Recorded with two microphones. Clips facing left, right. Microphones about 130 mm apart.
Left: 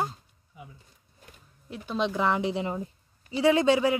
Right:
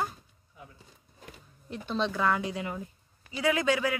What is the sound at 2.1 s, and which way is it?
Speech, 20° left (ahead or behind).